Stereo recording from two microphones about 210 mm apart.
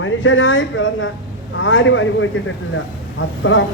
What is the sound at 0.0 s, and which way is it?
Speech, 65° left (ahead or behind).